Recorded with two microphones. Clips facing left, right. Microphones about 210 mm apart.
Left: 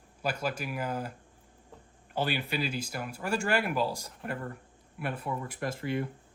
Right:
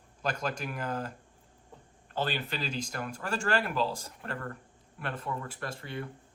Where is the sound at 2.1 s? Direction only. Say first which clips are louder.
Left 2 dB; 10° left (ahead or behind).